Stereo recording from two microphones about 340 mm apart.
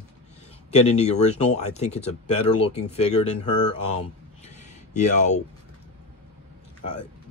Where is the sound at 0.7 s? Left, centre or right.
Centre.